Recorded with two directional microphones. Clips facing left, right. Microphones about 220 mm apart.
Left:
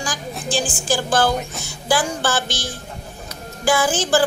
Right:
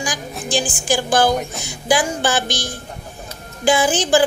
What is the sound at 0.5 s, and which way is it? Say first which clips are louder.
A woman's voice: right 2 dB; 15° right (ahead or behind).